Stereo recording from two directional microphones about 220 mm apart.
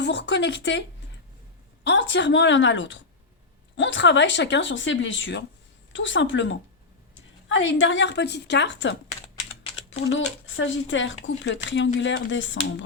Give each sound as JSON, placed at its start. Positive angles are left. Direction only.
{"t": 0.0, "sound": "speech", "side_deg": 50}
{"t": 10.1, "sound": "speech", "side_deg": 60}